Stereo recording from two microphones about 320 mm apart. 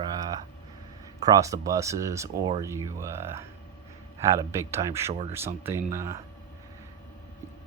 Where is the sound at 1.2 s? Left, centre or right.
Centre.